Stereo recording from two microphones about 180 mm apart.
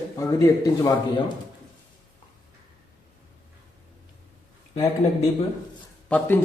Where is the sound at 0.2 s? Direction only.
15° left (ahead or behind).